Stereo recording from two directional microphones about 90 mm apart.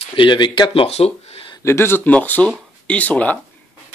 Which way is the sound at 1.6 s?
25° left (ahead or behind).